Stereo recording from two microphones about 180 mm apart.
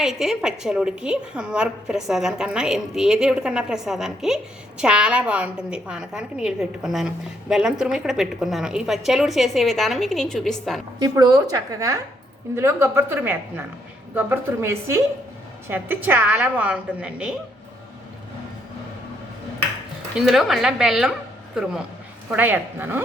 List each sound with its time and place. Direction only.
0.0 s a woman's voice: centre (ahead or behind)
11.0 s a woman's voice: 20° right (ahead or behind)
20.1 s a woman's voice: centre (ahead or behind)